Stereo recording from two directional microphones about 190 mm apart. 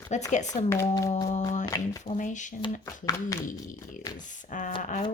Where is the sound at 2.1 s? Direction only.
40° left (ahead or behind).